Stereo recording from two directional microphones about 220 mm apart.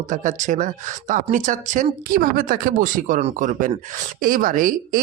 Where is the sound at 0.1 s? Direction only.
35° right (ahead or behind).